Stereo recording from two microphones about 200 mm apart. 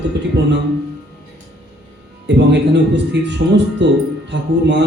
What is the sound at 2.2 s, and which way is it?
Speech, 60° right (ahead or behind).